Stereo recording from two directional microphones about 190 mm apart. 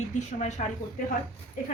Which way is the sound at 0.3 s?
40° left (ahead or behind).